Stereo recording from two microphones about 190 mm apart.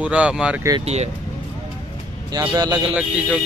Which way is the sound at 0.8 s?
35° right (ahead or behind).